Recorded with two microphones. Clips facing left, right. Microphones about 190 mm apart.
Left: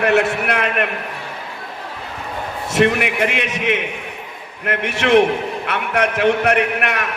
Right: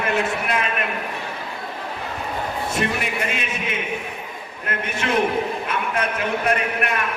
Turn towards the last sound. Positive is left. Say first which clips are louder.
# left 4 dB
turn(degrees=75)  # may be behind; listen again after turning